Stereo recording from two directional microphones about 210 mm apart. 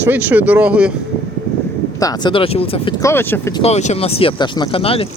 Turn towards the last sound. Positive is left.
turn(degrees=25)  # may be behind; listen again after turning